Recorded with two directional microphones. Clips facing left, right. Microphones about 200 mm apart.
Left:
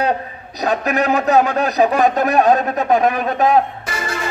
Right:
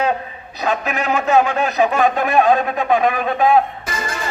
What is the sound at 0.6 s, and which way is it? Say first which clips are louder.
A man's voice: left 3 dB; 40° left (ahead or behind).